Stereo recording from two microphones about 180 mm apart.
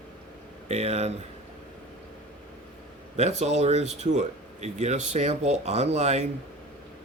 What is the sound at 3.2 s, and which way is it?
Speech, 40° right (ahead or behind).